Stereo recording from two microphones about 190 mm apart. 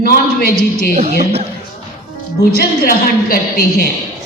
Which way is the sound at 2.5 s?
55° left (ahead or behind).